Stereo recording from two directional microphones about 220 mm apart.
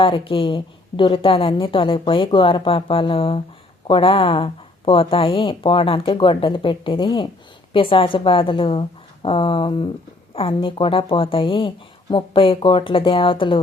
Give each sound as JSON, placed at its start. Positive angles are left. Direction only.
{"t": 0.0, "sound": "a woman's voice", "side_deg": 25}